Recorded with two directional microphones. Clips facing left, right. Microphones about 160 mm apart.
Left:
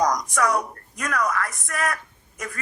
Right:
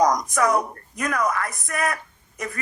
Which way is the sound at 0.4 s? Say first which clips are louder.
Right 3 dB; 25° right (ahead or behind).